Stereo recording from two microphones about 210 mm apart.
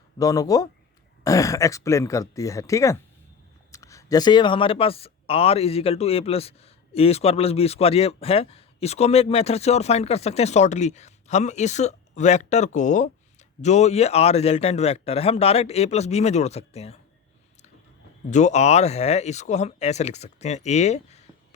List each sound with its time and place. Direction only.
0.2 s speech: 15° left (ahead or behind)
18.3 s speech: 35° left (ahead or behind)